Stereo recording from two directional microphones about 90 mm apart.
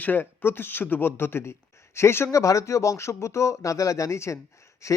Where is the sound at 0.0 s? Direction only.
20° left (ahead or behind).